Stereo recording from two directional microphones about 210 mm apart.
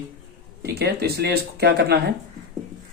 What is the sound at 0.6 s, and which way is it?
Speech, 50° right (ahead or behind).